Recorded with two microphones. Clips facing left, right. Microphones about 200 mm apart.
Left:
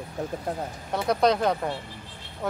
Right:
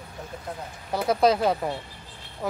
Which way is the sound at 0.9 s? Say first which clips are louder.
Right 1 dB; 5° right (ahead or behind).